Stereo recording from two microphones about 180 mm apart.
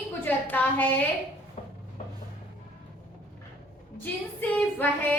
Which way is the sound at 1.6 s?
35° left (ahead or behind).